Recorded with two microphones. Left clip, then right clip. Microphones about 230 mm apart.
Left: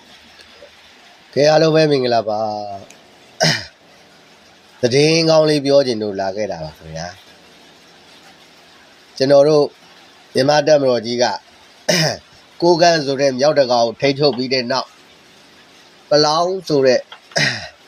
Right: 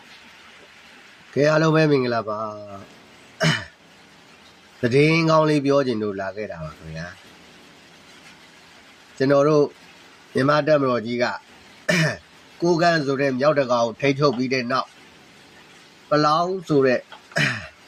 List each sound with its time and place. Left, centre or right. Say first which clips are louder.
1.4 s speech: left 6 dB; centre
3.3 s throat clearing: left 5 dB; centre
4.8 s speech: left 5 dB; centre
9.1 s speech: left 6 dB; centre
13.7 s a man's voice: left 5 dB; right
14.5 s speech: left 4 dB; centre
16.0 s speech: left 5 dB; centre